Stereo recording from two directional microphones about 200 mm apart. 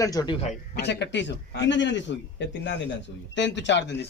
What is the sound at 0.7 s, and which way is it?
A man's voice, 60° left (ahead or behind).